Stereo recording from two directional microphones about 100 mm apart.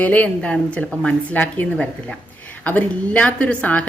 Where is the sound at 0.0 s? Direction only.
15° left (ahead or behind).